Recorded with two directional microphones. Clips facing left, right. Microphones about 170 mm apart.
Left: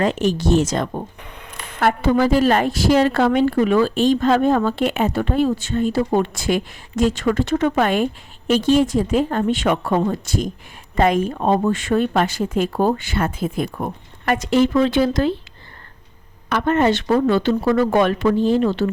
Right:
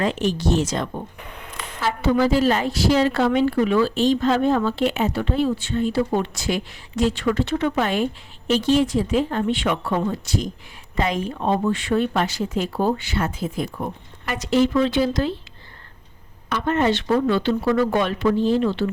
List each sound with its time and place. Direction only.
0.0 s a woman's voice: 45° left (ahead or behind)
16.5 s a woman's voice: 55° left (ahead or behind)